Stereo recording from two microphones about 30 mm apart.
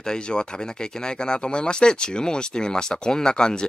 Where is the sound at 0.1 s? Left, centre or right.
Left.